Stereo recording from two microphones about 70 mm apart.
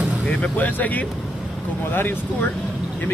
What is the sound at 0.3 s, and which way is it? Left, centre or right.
A man's voice, left.